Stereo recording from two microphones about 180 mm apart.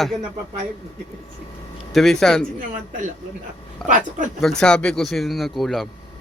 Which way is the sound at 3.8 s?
45° right (ahead or behind).